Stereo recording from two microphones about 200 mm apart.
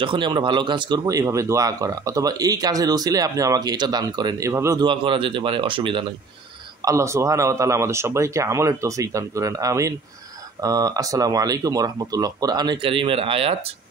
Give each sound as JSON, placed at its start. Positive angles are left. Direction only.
{"t": 0.0, "sound": "speech", "side_deg": -25}